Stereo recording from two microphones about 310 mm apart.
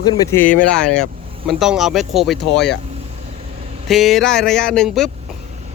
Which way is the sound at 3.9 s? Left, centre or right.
Centre.